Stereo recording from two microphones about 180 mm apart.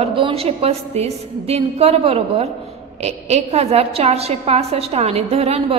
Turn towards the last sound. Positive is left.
turn(degrees=-35)  # may be behind; listen again after turning